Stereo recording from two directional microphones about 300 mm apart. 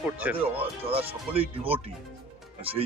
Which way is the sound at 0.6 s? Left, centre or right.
Centre.